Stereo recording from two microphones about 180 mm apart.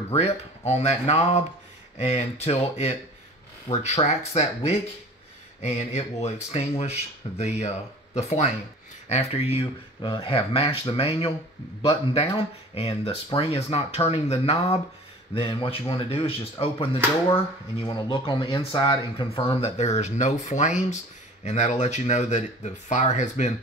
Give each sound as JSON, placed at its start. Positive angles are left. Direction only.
{"t": 0.1, "sound": "speech", "side_deg": 35}